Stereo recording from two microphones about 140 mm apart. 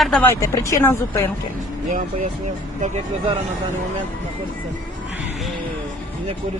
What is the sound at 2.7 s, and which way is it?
Speech, 55° right (ahead or behind).